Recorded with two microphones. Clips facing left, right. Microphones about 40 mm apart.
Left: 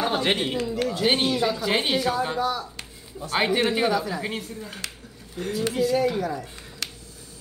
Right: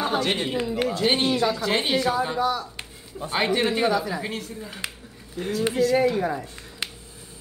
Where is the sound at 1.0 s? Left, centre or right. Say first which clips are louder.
Even; centre.